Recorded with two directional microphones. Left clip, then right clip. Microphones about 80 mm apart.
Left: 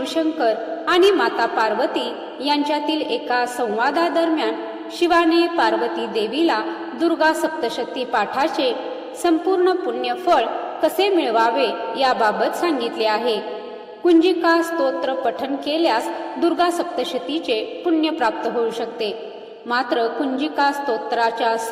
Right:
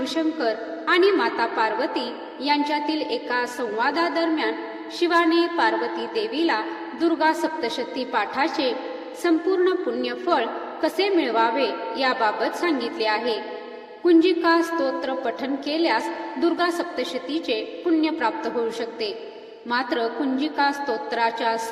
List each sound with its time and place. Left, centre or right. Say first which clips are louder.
0.0 s a woman's voice: left 4 dB; left